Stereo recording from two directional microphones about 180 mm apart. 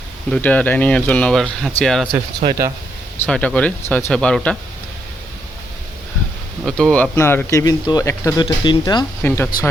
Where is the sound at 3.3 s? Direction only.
5° left (ahead or behind).